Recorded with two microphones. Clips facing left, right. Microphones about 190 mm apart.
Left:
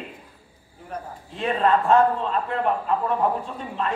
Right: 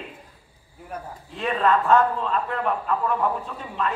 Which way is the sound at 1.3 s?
35° left (ahead or behind).